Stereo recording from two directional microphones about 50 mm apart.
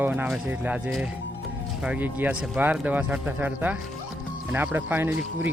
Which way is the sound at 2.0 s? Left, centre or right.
Right.